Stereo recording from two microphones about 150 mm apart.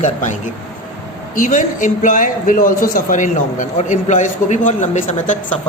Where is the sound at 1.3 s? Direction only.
60° left (ahead or behind).